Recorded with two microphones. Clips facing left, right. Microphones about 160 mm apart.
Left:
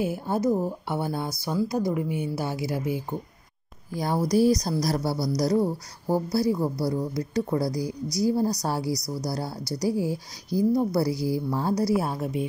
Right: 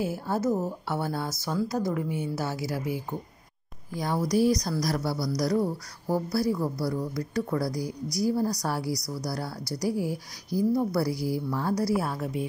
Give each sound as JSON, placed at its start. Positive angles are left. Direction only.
{"t": 0.0, "sound": "a woman's voice", "side_deg": 20}
{"t": 3.9, "sound": "a woman's voice", "side_deg": 35}